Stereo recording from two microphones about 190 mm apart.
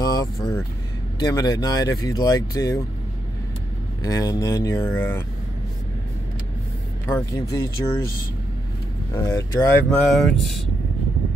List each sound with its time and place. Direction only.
0.0 s vehicle: 20° left (ahead or behind)
1.2 s speech: 20° left (ahead or behind)
4.0 s speech: 20° left (ahead or behind)
7.1 s speech: 15° left (ahead or behind)
9.1 s speech: 15° left (ahead or behind)